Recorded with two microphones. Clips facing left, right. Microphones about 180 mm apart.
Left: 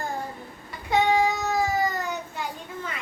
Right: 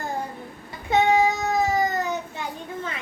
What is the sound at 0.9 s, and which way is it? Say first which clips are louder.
Child singing: right 2 dB; 20° right (ahead or behind).